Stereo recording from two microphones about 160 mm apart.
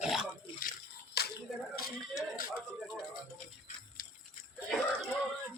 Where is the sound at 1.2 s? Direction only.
80° left.